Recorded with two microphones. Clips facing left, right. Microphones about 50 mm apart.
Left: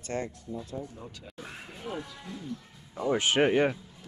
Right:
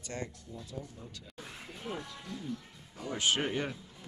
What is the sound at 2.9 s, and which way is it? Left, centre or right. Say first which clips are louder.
Speech: left 6 dB; left.